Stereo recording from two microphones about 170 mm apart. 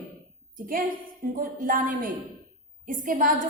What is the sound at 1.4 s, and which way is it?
A woman's voice, 55° right (ahead or behind).